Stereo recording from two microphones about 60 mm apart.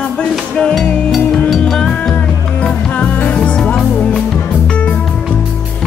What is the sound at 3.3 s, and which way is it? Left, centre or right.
Music, centre.